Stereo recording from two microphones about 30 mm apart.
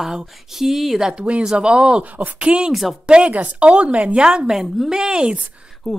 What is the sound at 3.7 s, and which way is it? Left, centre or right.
Speech, right.